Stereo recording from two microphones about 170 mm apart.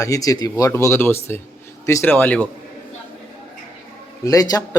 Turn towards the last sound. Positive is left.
turn(degrees=20)  # may be behind; listen again after turning